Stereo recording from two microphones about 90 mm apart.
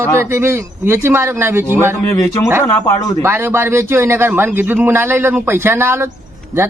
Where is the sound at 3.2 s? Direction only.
25° right (ahead or behind).